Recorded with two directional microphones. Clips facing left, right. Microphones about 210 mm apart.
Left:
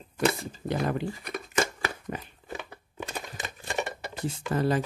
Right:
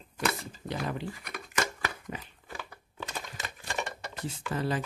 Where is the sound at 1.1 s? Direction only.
30° left (ahead or behind).